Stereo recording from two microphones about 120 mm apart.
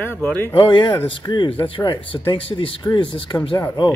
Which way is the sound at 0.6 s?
40° left (ahead or behind).